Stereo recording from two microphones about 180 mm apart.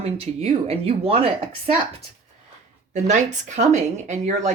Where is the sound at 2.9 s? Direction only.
40° right (ahead or behind).